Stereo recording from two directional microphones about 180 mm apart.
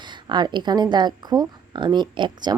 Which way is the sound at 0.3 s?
25° right (ahead or behind).